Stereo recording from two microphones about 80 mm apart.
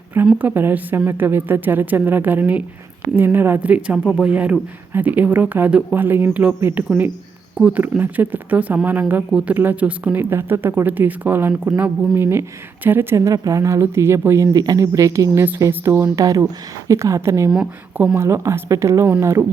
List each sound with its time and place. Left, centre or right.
0.3 s a woman's voice: right
10.2 s a woman's voice: right
13.1 s speech: right
14.5 s speech: right
17.9 s speech: right
18.2 s speech: right